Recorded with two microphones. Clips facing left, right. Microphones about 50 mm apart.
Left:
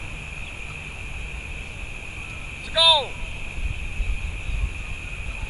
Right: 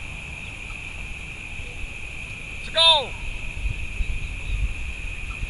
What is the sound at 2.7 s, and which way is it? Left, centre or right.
Speech, centre.